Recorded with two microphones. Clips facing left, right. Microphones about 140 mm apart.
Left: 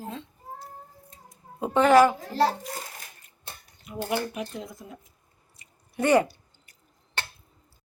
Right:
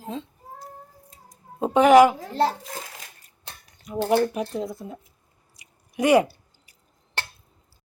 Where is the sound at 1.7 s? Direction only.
15° right (ahead or behind).